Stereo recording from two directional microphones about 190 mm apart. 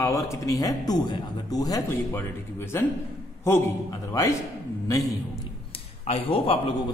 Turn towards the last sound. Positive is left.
turn(degrees=30)  # may be behind; listen again after turning